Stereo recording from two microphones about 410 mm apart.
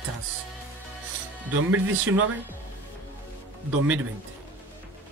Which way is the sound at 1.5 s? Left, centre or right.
Right.